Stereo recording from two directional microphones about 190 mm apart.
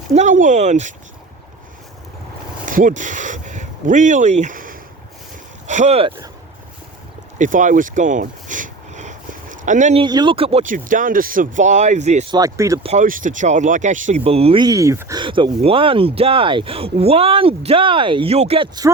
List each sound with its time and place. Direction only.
0.1 s speech: 40° right (ahead or behind)
2.6 s speech: 45° right (ahead or behind)
7.3 s a sound: 40° right (ahead or behind)
10.0 s speech: 25° right (ahead or behind)
12.3 s speech: 15° right (ahead or behind)
12.8 s speech: 40° right (ahead or behind); by 15.2 s 15° right (ahead or behind)
15.2 s speech: 25° right (ahead or behind)